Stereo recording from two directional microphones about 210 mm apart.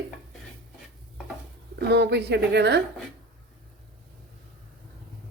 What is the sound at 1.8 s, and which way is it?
Speech, 50° right (ahead or behind).